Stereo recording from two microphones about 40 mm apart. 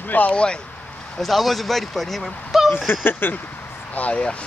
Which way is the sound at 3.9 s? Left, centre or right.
Left.